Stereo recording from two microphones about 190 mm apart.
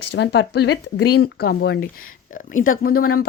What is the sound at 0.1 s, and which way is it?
Speech, 60° left (ahead or behind).